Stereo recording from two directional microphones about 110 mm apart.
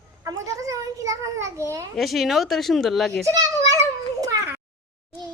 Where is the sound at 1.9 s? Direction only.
Centre (ahead or behind).